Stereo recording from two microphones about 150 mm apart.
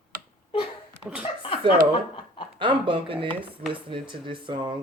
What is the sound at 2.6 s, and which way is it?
Speech, 35° right (ahead or behind).